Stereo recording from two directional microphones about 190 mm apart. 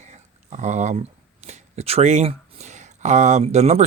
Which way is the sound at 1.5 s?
35° right (ahead or behind).